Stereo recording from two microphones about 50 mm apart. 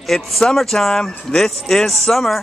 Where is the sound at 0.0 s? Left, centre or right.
Centre.